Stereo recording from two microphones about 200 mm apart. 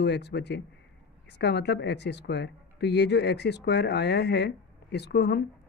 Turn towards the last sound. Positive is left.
turn(degrees=55)  # may be behind; listen again after turning